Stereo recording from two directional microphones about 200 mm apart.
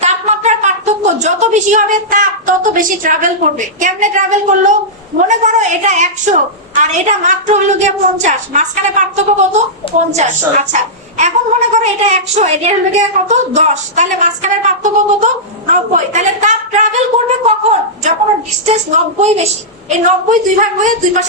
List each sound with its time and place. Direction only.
0.0 s a woman's voice: 35° right (ahead or behind)